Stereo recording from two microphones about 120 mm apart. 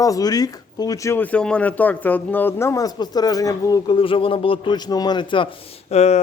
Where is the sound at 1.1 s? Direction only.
15° left (ahead or behind); by 3.9 s 30° left (ahead or behind).